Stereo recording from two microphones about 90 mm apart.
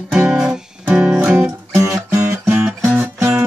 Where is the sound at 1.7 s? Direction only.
35° right (ahead or behind).